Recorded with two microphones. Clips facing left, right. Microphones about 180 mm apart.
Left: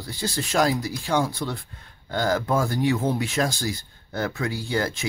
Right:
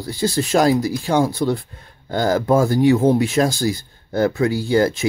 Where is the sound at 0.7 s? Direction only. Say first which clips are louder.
Right 7 dB; 40° right (ahead or behind).